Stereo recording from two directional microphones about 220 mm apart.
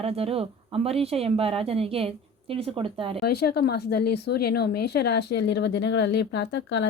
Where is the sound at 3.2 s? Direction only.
45° left (ahead or behind).